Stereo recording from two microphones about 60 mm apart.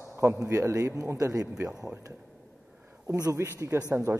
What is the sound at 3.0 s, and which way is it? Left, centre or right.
Speech, right.